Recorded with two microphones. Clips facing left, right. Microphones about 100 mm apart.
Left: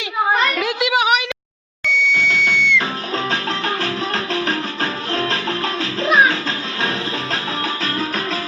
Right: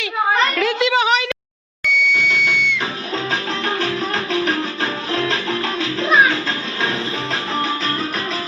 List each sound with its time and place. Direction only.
0.5 s a sound: 15° left (ahead or behind)
1.9 s music: 30° left (ahead or behind)
4.1 s music: 40° left (ahead or behind)